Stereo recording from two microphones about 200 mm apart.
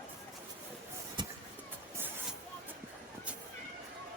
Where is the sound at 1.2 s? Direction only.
20° right (ahead or behind).